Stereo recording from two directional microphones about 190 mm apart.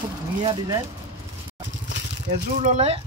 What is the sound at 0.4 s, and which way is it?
Speech, 25° right (ahead or behind).